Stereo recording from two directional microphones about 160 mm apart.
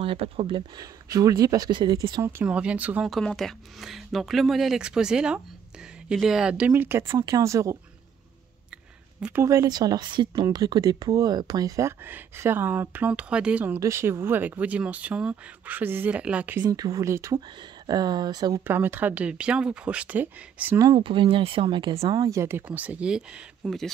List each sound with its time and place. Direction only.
0.0 s speech: 35° right (ahead or behind)
2.2 s speech: 10° right (ahead or behind)
9.2 s speech: 15° right (ahead or behind)
16.6 s speech: 20° right (ahead or behind)
18.6 s speech: 10° right (ahead or behind)
20.8 s speech: 30° right (ahead or behind)
22.1 s speech: 20° right (ahead or behind); by 23.9 s centre (ahead or behind)